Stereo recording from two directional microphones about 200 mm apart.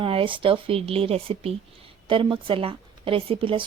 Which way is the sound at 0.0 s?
25° right (ahead or behind).